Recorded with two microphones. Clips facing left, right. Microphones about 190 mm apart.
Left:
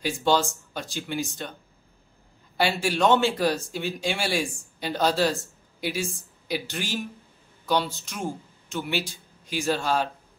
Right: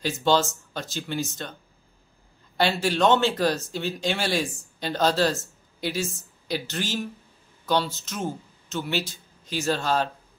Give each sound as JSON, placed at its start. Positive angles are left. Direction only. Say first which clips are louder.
{"t": 0.0, "sound": "speech", "louder": "right 1 dB", "side_deg": 10}
{"t": 2.5, "sound": "speech", "louder": "right 1 dB", "side_deg": 10}